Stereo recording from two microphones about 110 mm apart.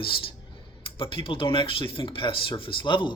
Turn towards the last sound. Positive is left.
turn(degrees=45)  # may be behind; listen again after turning